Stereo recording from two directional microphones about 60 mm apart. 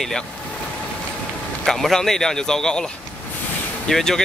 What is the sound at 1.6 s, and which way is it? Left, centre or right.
Speech, centre.